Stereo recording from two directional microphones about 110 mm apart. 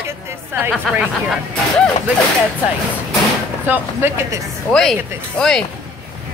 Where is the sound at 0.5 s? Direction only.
25° right (ahead or behind).